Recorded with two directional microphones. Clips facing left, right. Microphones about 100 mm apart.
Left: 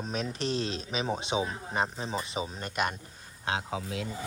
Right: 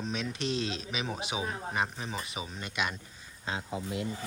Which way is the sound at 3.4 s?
85° left.